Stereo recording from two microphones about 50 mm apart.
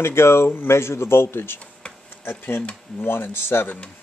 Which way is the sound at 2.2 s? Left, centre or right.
Left.